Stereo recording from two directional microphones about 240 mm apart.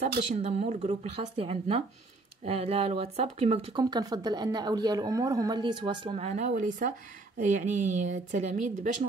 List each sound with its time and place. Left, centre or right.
0.0 s speech: right